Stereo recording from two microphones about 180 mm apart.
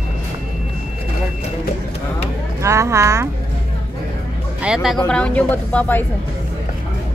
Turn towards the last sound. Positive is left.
turn(degrees=10)  # may be behind; listen again after turning